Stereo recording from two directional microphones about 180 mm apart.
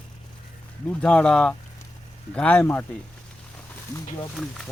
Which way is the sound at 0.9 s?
5° left (ahead or behind).